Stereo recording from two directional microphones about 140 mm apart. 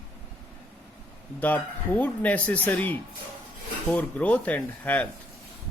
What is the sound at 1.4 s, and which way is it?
Speech, 10° left (ahead or behind).